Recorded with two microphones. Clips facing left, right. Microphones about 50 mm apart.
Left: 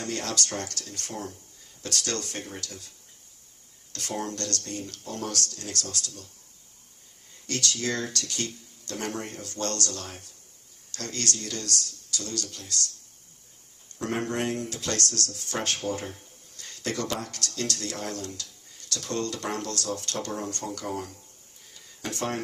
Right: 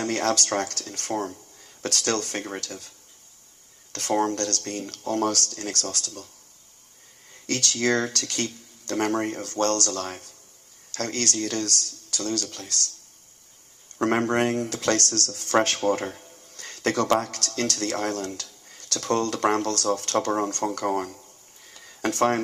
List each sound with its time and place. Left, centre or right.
0.0 s speech: right
3.9 s speech: right
7.4 s speech: right
14.0 s speech: right
21.7 s a sound: right